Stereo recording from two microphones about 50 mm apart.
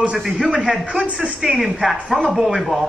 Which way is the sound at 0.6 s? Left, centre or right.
Centre.